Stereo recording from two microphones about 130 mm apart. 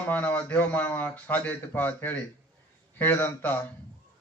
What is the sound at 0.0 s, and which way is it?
Speech, 10° left (ahead or behind).